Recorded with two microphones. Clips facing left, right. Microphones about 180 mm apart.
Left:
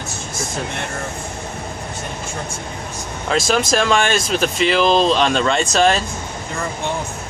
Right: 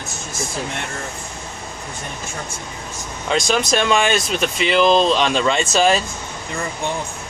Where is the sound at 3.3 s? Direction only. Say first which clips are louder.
Left 1 dB; centre (ahead or behind).